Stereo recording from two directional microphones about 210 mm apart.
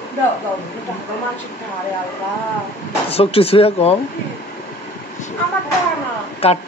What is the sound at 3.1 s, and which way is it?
Speech, 30° left (ahead or behind).